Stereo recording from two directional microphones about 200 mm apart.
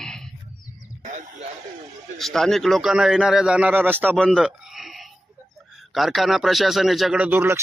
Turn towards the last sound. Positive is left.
turn(degrees=-10)  # may be behind; listen again after turning